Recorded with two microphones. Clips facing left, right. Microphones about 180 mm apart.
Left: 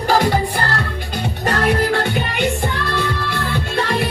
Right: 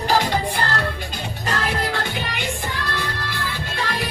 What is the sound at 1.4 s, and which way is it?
Music, 55° left (ahead or behind).